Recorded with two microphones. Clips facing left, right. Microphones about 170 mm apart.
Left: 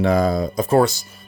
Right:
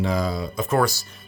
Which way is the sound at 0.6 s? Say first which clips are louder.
Left 5 dB; 25° left (ahead or behind).